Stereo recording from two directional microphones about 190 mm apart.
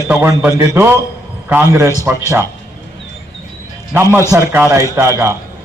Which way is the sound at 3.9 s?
15° right (ahead or behind).